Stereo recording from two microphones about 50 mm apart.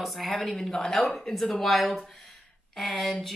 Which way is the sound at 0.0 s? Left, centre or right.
Centre.